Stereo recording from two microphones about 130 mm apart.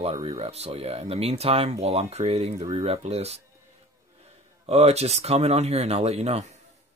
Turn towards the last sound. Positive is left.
turn(degrees=-55)  # may be behind; listen again after turning